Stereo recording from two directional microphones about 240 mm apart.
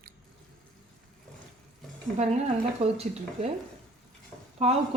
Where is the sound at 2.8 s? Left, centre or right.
Right.